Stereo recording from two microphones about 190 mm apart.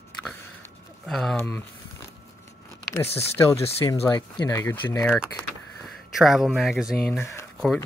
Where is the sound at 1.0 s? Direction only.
Centre (ahead or behind).